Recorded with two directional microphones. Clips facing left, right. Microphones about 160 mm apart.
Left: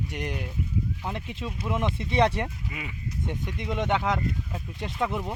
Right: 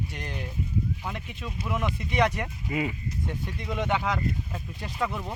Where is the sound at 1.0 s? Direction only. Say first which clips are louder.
Left 3 dB; 30° left (ahead or behind).